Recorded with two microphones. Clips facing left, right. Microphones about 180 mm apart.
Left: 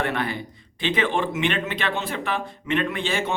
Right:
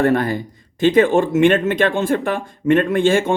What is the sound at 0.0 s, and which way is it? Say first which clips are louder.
A man's voice: right 9 dB; 45° right (ahead or behind).